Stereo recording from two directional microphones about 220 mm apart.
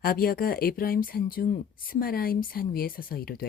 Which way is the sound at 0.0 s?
40° left (ahead or behind).